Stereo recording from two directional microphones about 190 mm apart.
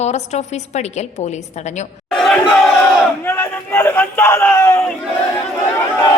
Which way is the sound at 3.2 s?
10° left (ahead or behind).